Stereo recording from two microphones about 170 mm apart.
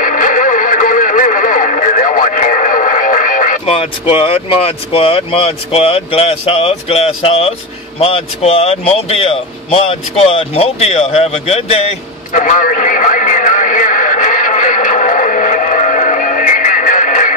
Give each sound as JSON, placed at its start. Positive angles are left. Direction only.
{"t": 0.0, "sound": "radio", "side_deg": 50}
{"t": 3.6, "sound": "speech", "side_deg": 30}
{"t": 12.4, "sound": "a sound", "side_deg": 50}